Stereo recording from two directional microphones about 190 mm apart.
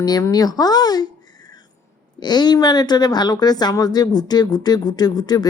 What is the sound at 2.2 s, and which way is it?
Speech, 20° left (ahead or behind).